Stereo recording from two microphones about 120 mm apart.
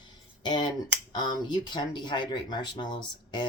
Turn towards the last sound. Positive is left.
turn(degrees=40)  # may be behind; listen again after turning